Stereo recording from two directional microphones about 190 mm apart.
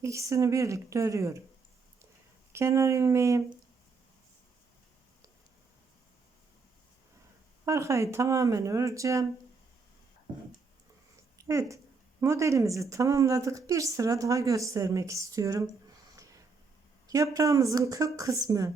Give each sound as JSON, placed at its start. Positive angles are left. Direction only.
{"t": 0.0, "sound": "speech", "side_deg": -15}
{"t": 2.5, "sound": "speech", "side_deg": -15}
{"t": 7.6, "sound": "speech", "side_deg": -15}
{"t": 11.3, "sound": "speech", "side_deg": -15}
{"t": 17.1, "sound": "speech", "side_deg": -15}